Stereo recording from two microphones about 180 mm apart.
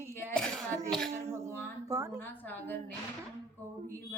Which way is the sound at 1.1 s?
15° right (ahead or behind).